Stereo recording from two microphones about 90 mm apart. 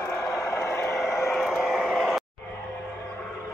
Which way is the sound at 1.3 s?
Centre (ahead or behind).